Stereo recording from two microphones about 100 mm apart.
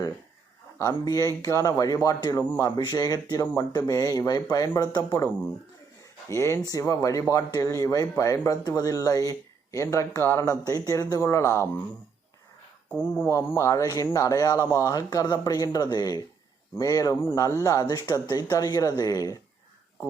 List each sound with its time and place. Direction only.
0.8 s speech: 25° left (ahead or behind)
2.4 s speech: 20° left (ahead or behind)
2.7 s speech: 40° left (ahead or behind)
6.2 s speech: 30° left (ahead or behind)
12.9 s speech: 20° left (ahead or behind); by 19.4 s 35° left (ahead or behind)